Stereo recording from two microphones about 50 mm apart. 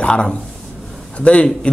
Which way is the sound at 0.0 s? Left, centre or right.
Centre.